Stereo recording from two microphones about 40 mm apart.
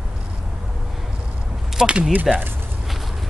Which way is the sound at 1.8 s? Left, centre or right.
Centre.